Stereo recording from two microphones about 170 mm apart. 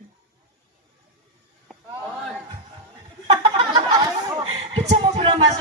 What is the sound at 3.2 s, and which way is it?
Chuckle, 35° right (ahead or behind).